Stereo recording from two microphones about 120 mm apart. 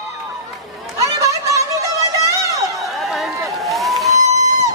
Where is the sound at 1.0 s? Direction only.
25° right (ahead or behind).